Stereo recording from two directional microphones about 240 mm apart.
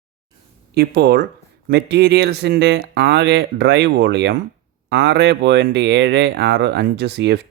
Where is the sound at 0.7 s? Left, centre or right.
Right.